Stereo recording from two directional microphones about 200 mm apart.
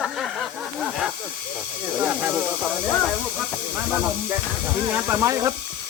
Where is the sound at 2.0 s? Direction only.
5° right (ahead or behind).